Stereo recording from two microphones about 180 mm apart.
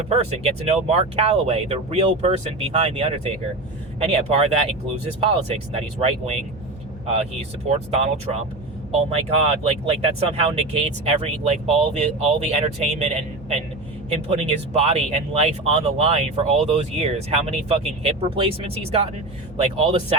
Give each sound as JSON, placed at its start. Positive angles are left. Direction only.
{"t": 0.0, "sound": "speech", "side_deg": -35}
{"t": 7.7, "sound": "speech", "side_deg": -35}